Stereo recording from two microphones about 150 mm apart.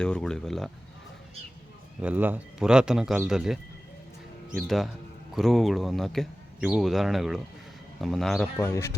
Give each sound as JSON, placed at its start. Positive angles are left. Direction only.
{"t": 0.0, "sound": "speech", "side_deg": 5}
{"t": 2.0, "sound": "speech", "side_deg": -10}
{"t": 8.5, "sound": "speech", "side_deg": 20}